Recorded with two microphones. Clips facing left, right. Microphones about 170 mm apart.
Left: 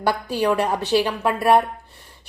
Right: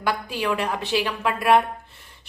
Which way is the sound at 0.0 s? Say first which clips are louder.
Left 5 dB; 40° left (ahead or behind).